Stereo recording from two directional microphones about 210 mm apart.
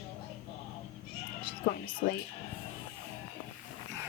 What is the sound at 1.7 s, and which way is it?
Music, 45° left (ahead or behind).